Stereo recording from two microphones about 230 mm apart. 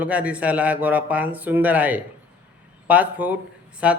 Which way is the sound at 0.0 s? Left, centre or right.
Centre.